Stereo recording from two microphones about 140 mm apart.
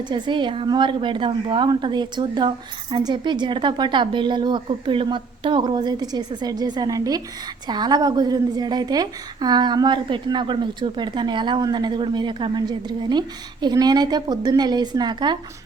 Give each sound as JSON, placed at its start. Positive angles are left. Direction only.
{"t": 0.0, "sound": "a woman's voice", "side_deg": -35}